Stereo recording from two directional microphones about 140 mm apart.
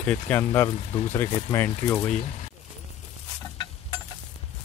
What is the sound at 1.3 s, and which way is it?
Speech, 25° left (ahead or behind).